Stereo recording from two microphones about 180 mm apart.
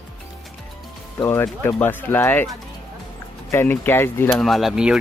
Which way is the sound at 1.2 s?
15° left (ahead or behind).